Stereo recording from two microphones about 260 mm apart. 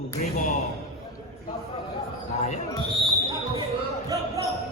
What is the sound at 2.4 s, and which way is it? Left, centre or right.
Basketball bounce, left.